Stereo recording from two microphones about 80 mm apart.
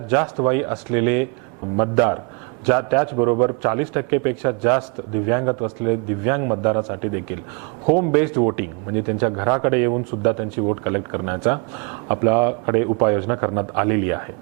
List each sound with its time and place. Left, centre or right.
0.1 s speech: right